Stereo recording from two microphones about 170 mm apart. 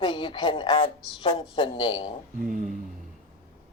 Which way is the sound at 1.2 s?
30° left (ahead or behind).